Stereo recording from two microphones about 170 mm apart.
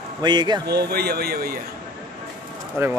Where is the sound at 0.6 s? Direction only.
70° right (ahead or behind).